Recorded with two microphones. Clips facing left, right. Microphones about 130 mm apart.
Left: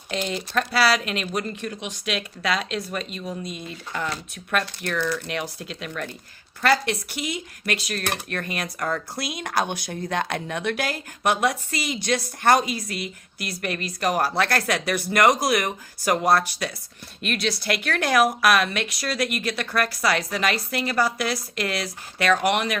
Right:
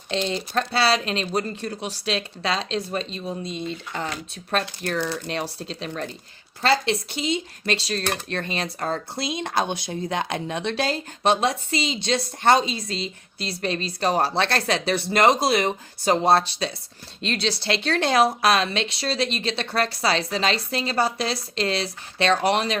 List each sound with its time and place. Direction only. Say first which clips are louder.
0.3 s speech: right 1 dB; 30° right (ahead or behind)